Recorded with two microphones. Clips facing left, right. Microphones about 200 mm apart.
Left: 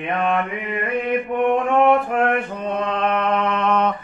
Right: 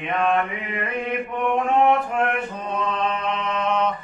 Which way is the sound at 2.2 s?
60° left (ahead or behind).